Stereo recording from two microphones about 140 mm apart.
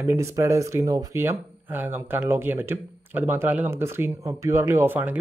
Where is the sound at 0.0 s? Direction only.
20° right (ahead or behind).